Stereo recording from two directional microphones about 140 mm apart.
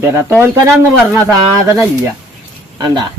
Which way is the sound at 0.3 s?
20° right (ahead or behind).